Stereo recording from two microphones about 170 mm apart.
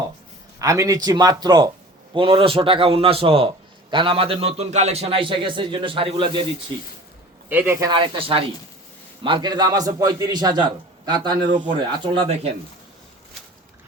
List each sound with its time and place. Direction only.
0.6 s a man's voice: 20° right (ahead or behind)
7.5 s speech: 10° right (ahead or behind)
7.9 s a man's voice: 30° right (ahead or behind)